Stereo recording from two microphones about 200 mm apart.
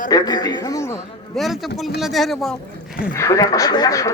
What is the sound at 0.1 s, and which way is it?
Speech, 20° left (ahead or behind).